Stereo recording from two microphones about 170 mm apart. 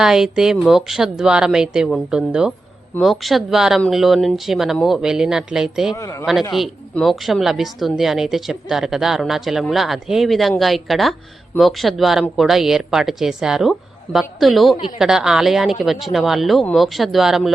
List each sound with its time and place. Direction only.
0.0 s speech: 5° right (ahead or behind)
5.9 s speech: 20° left (ahead or behind)
6.5 s speech: centre (ahead or behind)